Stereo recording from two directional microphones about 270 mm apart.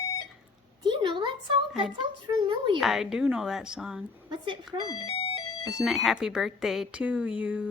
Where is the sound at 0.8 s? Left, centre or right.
Centre.